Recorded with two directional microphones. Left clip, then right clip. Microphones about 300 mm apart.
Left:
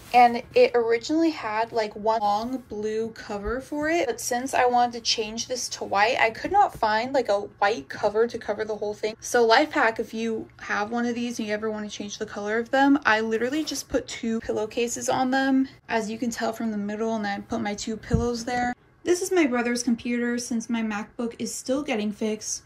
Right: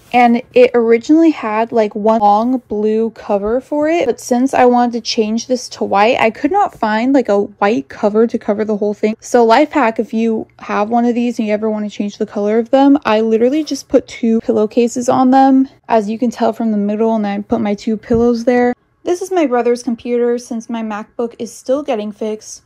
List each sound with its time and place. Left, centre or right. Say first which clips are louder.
0.1 s a woman's voice: right 7 dB; centre
8.6 s a woman's voice: right 12 dB; right
9.0 s a woman's voice: right 10 dB; centre